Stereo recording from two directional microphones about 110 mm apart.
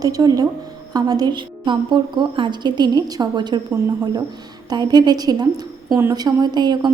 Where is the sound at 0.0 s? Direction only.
35° right (ahead or behind).